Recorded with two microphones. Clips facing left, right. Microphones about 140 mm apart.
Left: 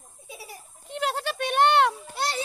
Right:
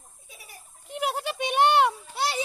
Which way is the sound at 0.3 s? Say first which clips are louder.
Left 9 dB; 25° left (ahead or behind).